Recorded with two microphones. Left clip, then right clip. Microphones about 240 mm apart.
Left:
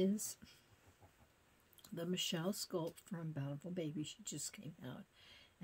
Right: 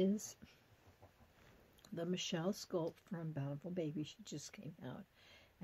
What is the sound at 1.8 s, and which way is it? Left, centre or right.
Speech, centre.